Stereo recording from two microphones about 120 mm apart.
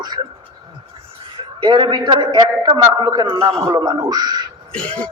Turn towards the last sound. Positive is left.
turn(degrees=10)  # may be behind; listen again after turning